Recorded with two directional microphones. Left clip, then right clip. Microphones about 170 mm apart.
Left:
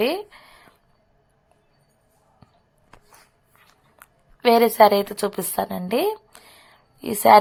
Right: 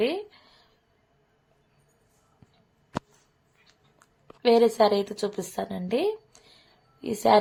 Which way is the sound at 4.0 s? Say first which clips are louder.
Left 5 dB; 15° left (ahead or behind).